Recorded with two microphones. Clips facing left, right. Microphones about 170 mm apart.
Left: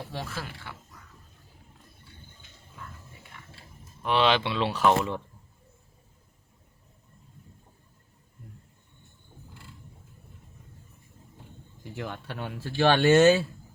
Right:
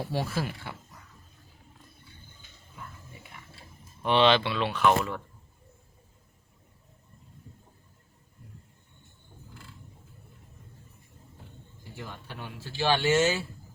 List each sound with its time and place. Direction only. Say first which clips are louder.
0.1 s speech: right 6 dB; 10° right (ahead or behind)
4.0 s speech: right 2 dB; 5° left (ahead or behind)
4.4 s speech: left 1 dB; 25° left (ahead or behind)
11.9 s speech: left 6 dB; 65° left (ahead or behind)